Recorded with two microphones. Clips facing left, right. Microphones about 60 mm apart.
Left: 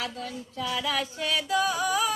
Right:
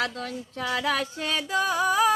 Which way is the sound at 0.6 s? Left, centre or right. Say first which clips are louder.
Right 3 dB; right.